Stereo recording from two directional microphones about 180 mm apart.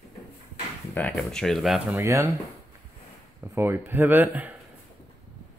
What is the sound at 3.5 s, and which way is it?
Speech, 10° right (ahead or behind).